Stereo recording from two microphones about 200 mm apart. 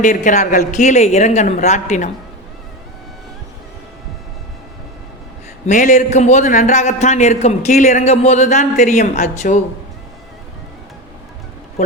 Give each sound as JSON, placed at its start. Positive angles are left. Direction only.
{"t": 0.0, "sound": "a man's voice", "side_deg": 40}
{"t": 5.6, "sound": "a man's voice", "side_deg": 40}